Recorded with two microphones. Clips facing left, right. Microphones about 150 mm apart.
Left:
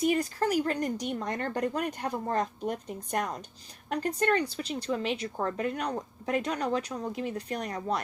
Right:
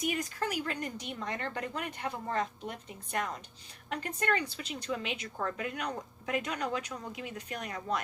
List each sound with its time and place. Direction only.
0.0 s speech: 35° left (ahead or behind)